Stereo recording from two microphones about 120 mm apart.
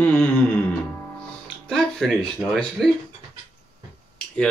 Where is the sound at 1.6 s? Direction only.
5° left (ahead or behind).